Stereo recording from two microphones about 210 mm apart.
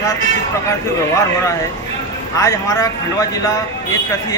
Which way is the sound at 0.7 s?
15° left (ahead or behind).